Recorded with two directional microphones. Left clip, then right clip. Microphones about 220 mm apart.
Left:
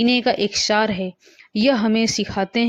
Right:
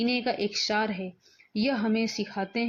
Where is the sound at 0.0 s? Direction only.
35° left (ahead or behind).